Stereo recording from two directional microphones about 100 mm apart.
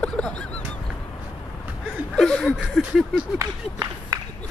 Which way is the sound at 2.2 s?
5° left (ahead or behind).